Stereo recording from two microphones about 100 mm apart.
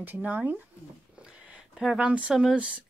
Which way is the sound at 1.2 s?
10° right (ahead or behind).